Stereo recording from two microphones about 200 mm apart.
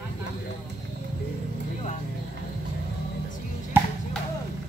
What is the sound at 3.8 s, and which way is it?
Music, 10° right (ahead or behind).